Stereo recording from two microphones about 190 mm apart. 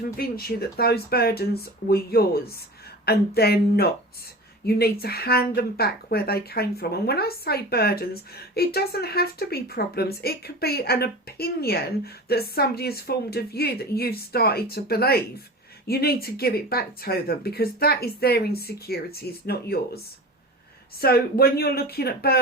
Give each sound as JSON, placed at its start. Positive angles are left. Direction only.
{"t": 0.2, "sound": "speech", "side_deg": 55}
{"t": 21.0, "sound": "speech", "side_deg": 55}